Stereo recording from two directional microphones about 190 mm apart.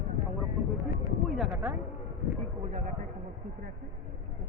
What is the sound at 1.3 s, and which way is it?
Speech, 5° right (ahead or behind).